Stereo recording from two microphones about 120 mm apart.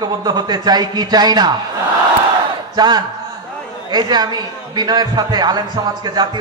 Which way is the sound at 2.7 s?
35° right (ahead or behind).